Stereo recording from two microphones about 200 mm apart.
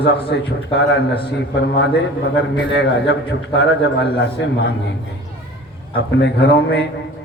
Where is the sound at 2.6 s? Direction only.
60° left (ahead or behind).